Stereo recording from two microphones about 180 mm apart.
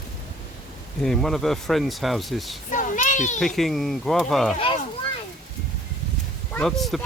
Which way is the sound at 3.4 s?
Centre (ahead or behind).